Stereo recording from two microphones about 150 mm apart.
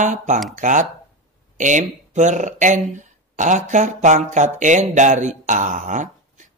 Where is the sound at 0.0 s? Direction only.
55° right (ahead or behind).